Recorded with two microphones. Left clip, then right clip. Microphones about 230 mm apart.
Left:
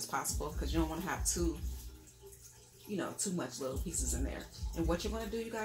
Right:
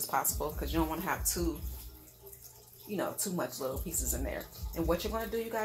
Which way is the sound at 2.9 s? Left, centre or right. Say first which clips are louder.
Right 4 dB; centre.